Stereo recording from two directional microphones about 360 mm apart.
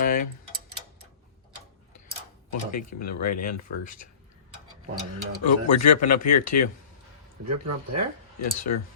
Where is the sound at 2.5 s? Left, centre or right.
Left.